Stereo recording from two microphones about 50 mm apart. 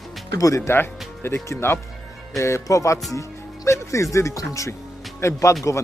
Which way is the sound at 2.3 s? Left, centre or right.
Left.